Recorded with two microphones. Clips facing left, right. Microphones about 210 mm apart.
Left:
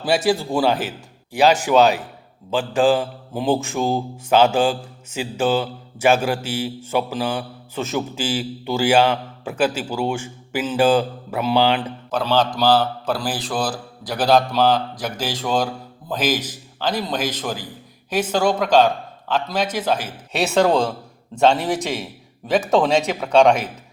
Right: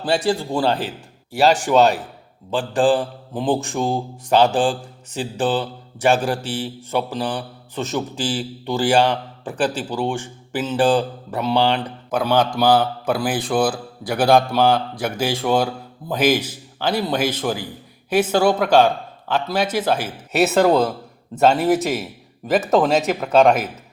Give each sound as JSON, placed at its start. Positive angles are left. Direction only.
{"t": 0.0, "sound": "mantra", "side_deg": 5}
{"t": 5.2, "sound": "speech", "side_deg": 5}
{"t": 6.4, "sound": "a man's voice", "side_deg": -30}
{"t": 6.9, "sound": "speech", "side_deg": 5}
{"t": 12.1, "sound": "speech", "side_deg": -10}
{"t": 21.3, "sound": "mantra", "side_deg": -5}